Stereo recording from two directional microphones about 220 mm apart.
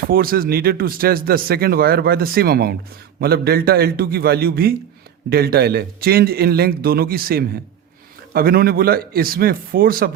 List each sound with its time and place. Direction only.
0.1 s speech: 40° right (ahead or behind)